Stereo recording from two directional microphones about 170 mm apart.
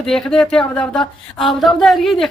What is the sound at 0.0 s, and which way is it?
Speech, 5° left (ahead or behind).